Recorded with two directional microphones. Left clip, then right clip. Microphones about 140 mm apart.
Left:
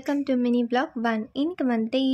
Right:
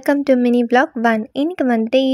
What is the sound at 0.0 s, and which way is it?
Speech, 65° right (ahead or behind).